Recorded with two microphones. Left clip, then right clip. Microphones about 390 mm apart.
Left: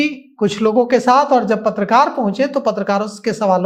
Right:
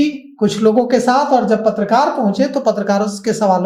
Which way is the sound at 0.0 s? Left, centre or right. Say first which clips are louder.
Right 1 dB; left.